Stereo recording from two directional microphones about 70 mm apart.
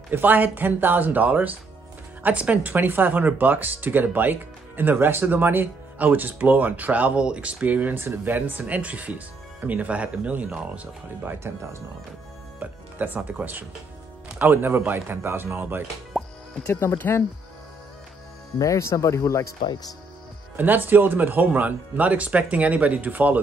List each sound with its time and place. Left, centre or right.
0.1 s speech: right
11.2 s speech: right
12.5 s speech: right
16.1 s music: centre
16.6 s speech: left
18.6 s speech: left
20.5 s speech: right